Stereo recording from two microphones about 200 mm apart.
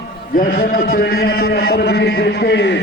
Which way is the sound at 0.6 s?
45° left (ahead or behind).